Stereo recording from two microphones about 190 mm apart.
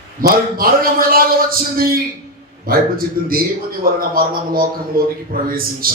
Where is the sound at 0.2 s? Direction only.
50° right (ahead or behind).